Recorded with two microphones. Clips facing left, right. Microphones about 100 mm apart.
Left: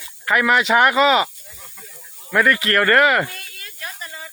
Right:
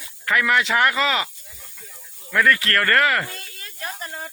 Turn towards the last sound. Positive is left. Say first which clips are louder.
# right 2 dB
turn(degrees=-45)  # may be behind; listen again after turning